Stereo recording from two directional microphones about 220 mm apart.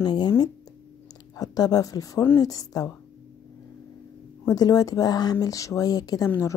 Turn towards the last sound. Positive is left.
turn(degrees=10)  # may be behind; listen again after turning